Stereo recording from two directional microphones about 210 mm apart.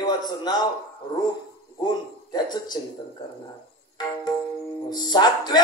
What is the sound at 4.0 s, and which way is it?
Speech, 20° left (ahead or behind).